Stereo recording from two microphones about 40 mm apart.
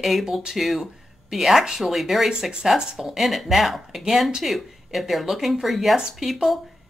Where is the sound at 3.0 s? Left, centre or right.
Centre.